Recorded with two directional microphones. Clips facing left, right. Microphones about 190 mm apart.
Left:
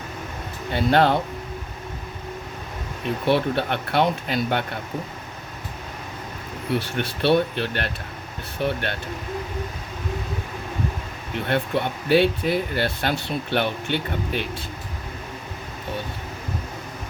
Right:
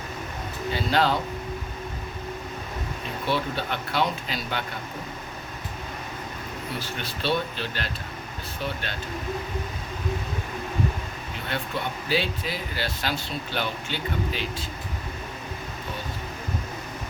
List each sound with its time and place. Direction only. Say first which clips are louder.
0.7 s speech: left 5 dB; 60° left (ahead or behind)
3.2 s speech: left 6 dB; 60° left (ahead or behind)
6.7 s speech: left 7 dB; 65° left (ahead or behind)
11.4 s speech: left 7 dB; 60° left (ahead or behind)